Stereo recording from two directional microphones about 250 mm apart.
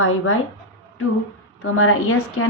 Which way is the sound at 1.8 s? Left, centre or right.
Left.